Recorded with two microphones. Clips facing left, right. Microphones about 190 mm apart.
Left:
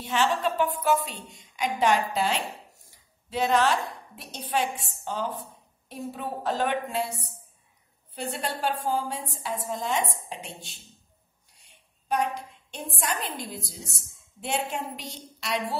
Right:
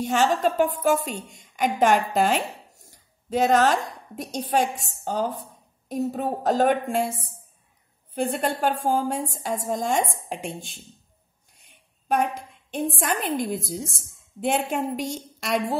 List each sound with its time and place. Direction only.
0.0 s a woman's voice: 45° right (ahead or behind)
11.5 s a sound: 50° right (ahead or behind)
13.0 s a woman's voice: 50° right (ahead or behind)